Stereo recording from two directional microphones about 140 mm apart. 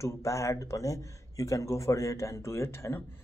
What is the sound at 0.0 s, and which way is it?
Speech, 20° left (ahead or behind).